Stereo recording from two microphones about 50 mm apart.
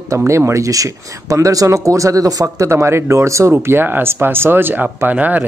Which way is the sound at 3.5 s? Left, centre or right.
Right.